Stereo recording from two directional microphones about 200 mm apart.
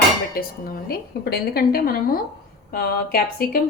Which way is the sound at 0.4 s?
50° left (ahead or behind).